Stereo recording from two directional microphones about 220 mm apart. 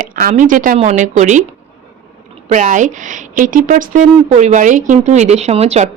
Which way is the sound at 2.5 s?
35° right (ahead or behind).